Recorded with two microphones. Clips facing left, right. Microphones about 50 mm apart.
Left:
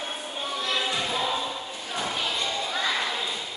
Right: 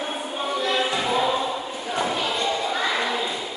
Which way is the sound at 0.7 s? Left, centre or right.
Centre.